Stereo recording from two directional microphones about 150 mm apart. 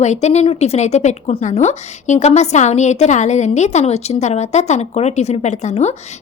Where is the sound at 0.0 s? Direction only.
50° left (ahead or behind).